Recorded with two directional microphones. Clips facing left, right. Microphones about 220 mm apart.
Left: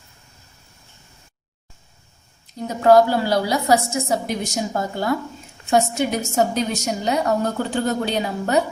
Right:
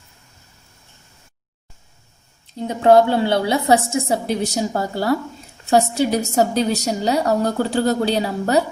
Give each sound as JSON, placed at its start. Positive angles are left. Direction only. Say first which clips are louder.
{"t": 2.6, "sound": "a woman's voice", "louder": "right 1 dB", "side_deg": -25}